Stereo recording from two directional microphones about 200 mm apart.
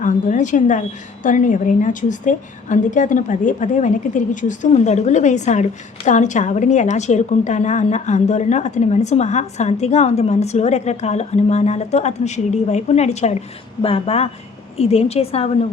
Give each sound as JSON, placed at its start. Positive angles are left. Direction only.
{"t": 0.0, "sound": "a woman's voice", "side_deg": 40}